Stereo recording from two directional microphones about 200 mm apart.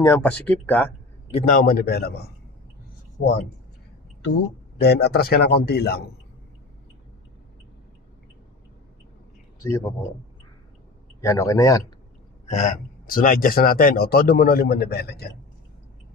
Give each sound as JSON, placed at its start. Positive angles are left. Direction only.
{"t": 0.0, "sound": "speech", "side_deg": 10}
{"t": 1.3, "sound": "speech", "side_deg": 40}
{"t": 4.7, "sound": "speech", "side_deg": 55}
{"t": 9.6, "sound": "a man's voice", "side_deg": 15}
{"t": 11.1, "sound": "speech", "side_deg": 15}
{"t": 12.4, "sound": "speech", "side_deg": 35}